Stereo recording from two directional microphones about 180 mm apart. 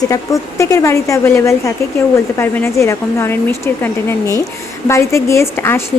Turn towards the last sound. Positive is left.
turn(degrees=15)  # may be behind; listen again after turning